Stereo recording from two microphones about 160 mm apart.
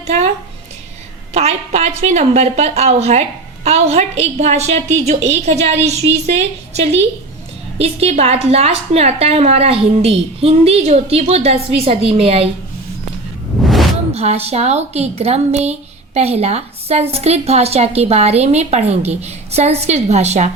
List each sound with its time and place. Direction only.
1.3 s a woman's voice: 45° right (ahead or behind)
13.6 s a sound: centre (ahead or behind)
14.1 s a woman's voice: 40° right (ahead or behind)